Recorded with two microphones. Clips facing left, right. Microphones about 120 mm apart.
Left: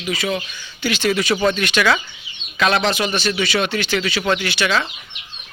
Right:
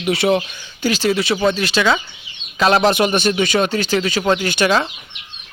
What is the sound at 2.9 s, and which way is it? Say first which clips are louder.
Speech: right 5 dB; 50° right (ahead or behind).